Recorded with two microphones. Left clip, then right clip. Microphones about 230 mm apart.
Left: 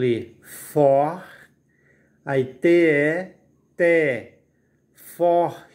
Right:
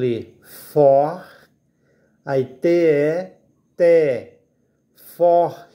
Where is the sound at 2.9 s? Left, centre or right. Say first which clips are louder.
Right 2 dB; centre.